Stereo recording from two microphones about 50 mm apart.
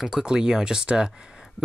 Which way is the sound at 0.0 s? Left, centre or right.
Centre.